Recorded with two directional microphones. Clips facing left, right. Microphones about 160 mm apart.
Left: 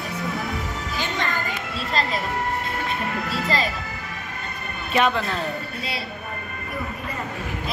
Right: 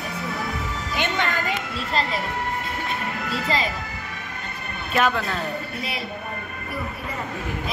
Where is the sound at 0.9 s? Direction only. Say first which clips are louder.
Right 3 dB; 65° right (ahead or behind).